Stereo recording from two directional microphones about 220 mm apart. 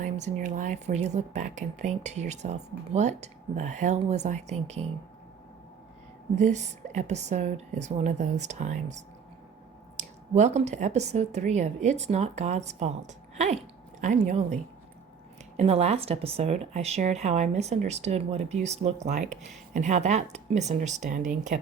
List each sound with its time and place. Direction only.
0.0 s speech: 35° right (ahead or behind)
6.3 s speech: 30° right (ahead or behind)
10.0 s speech: 30° right (ahead or behind)